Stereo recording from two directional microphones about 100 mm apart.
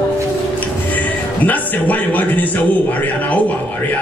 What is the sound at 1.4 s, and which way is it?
A man's voice, 15° left (ahead or behind).